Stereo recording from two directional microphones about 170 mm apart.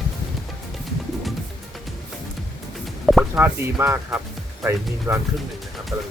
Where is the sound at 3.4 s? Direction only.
15° right (ahead or behind).